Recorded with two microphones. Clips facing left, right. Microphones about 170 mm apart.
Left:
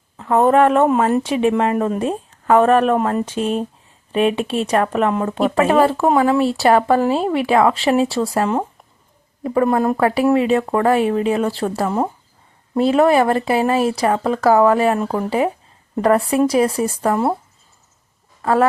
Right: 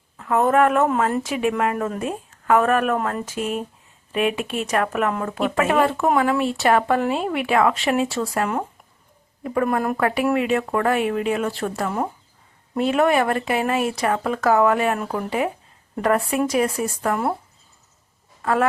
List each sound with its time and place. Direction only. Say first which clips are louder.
0.2 s a woman's voice: left 4 dB; 30° left (ahead or behind)
18.4 s speech: left 4 dB; 30° left (ahead or behind)